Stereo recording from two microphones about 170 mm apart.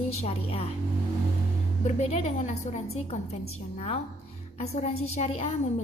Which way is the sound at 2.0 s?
40° left (ahead or behind).